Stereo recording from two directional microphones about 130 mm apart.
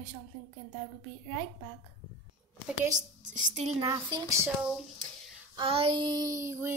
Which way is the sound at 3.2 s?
70° right (ahead or behind).